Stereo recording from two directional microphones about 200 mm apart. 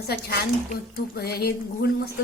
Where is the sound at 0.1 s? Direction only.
55° left (ahead or behind).